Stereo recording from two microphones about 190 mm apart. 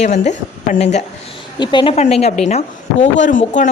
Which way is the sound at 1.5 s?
25° left (ahead or behind).